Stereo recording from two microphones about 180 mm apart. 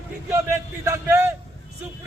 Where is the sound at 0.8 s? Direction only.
15° right (ahead or behind).